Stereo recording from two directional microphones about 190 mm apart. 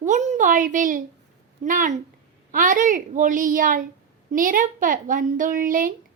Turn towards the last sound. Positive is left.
turn(degrees=-45)  # may be behind; listen again after turning